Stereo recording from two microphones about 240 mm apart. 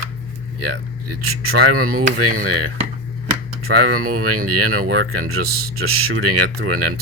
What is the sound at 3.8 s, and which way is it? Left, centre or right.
Speech, right.